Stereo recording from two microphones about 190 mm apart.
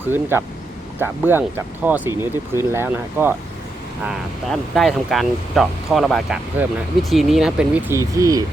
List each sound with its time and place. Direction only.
0.1 s speech: 10° right (ahead or behind)
4.4 s speech: centre (ahead or behind); by 8.4 s 15° right (ahead or behind)